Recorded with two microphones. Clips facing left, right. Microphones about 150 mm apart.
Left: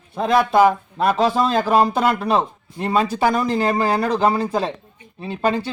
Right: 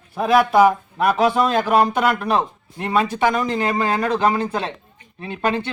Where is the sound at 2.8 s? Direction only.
30° left (ahead or behind).